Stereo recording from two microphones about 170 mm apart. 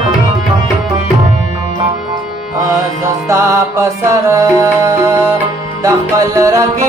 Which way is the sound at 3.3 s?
15° right (ahead or behind).